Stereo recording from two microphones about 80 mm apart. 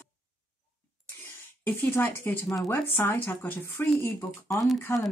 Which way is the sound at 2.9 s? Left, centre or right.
Left.